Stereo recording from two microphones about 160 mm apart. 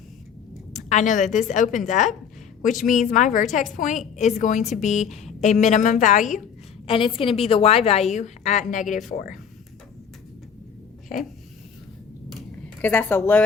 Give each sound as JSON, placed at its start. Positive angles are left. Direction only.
{"t": 0.7, "sound": "a woman's voice", "side_deg": 50}
{"t": 6.8, "sound": "a woman's voice", "side_deg": 35}
{"t": 12.8, "sound": "a woman's voice", "side_deg": 15}